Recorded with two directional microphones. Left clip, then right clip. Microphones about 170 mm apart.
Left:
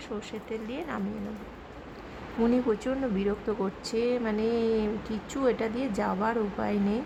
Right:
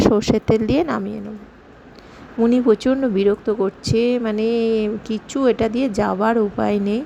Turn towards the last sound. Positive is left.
turn(degrees=-35)  # may be behind; listen again after turning